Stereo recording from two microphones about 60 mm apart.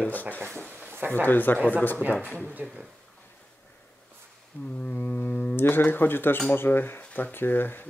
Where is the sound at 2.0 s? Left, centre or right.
Right.